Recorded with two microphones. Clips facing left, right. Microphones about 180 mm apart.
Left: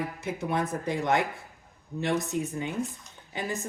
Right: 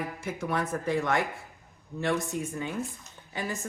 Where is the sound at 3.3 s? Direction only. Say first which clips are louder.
Left 1 dB; 20° left (ahead or behind).